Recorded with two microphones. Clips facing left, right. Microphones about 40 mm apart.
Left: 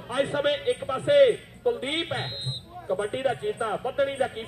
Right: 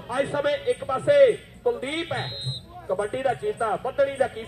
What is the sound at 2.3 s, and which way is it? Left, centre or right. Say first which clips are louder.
Speech: right 1 dB; centre.